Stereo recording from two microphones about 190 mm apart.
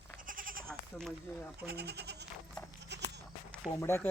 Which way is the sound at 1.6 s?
55° right (ahead or behind).